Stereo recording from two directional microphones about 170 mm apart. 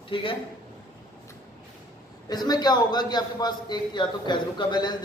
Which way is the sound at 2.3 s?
25° left (ahead or behind).